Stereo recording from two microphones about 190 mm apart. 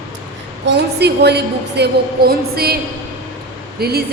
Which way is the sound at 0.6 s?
60° right (ahead or behind).